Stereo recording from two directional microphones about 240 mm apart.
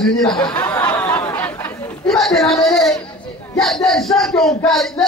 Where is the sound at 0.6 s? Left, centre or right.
Centre.